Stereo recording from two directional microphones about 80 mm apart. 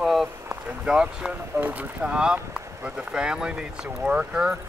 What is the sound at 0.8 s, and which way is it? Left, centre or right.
Speech, centre.